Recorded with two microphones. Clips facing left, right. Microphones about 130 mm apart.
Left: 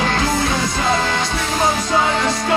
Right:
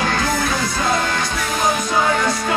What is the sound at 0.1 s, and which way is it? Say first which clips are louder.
Music: left 1 dB; 25° left (ahead or behind).